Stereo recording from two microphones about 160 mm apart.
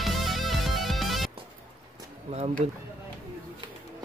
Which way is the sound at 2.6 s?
40° right (ahead or behind).